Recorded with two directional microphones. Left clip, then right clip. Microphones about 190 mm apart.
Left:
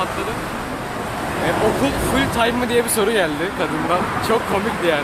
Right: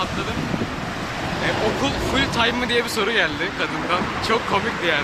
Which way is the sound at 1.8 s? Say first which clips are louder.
Left 2 dB; 15° left (ahead or behind).